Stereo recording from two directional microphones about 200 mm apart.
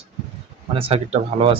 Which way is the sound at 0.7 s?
30° right (ahead or behind).